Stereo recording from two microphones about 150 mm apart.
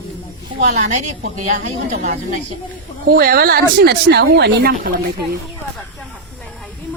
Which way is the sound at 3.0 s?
85° right.